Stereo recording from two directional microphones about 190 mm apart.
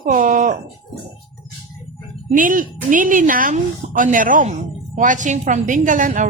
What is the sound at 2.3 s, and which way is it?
A woman's voice, 45° right (ahead or behind).